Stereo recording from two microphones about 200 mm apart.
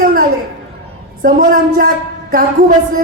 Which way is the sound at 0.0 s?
45° right (ahead or behind).